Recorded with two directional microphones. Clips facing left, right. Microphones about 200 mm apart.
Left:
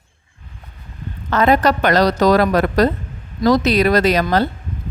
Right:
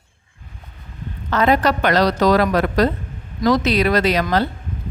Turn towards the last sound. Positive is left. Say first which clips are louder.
# left 2 dB
turn(degrees=45)  # may be behind; listen again after turning